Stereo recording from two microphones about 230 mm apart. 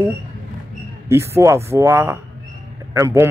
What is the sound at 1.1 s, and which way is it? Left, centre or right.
A man's voice, centre.